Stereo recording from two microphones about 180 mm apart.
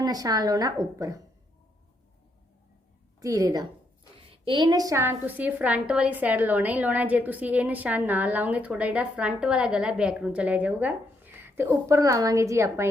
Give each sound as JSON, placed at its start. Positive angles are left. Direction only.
{"t": 0.0, "sound": "a woman's voice", "side_deg": -20}
{"t": 3.2, "sound": "a woman's voice", "side_deg": -20}